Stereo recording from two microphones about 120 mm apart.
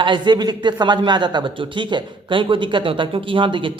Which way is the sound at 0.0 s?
40° right (ahead or behind).